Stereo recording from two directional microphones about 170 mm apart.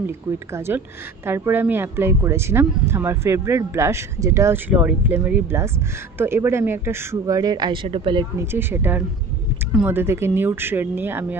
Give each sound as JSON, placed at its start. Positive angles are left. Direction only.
{"t": 0.7, "sound": "speech", "side_deg": -15}
{"t": 8.4, "sound": "speech", "side_deg": -15}